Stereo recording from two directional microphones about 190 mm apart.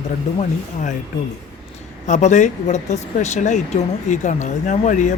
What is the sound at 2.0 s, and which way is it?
Speech, 40° left (ahead or behind).